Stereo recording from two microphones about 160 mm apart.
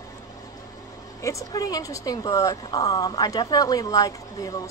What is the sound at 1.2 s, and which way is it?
Speech, 20° left (ahead or behind).